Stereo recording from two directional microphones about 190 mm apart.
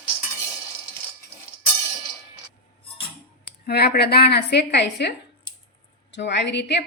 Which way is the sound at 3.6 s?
55° left (ahead or behind).